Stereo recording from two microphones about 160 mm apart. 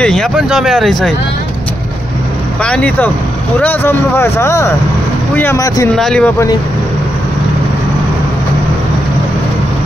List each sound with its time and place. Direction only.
0.0 s speech: centre (ahead or behind)
2.6 s speech: 5° left (ahead or behind)
5.9 s speech: 5° left (ahead or behind)